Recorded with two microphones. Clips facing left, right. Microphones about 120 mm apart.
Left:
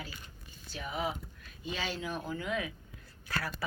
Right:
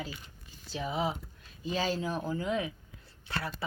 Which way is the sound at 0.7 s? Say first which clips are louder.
Right 4 dB; 30° right (ahead or behind).